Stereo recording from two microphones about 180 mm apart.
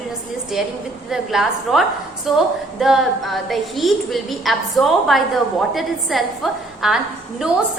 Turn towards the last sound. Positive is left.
turn(degrees=0)  # may be behind; listen again after turning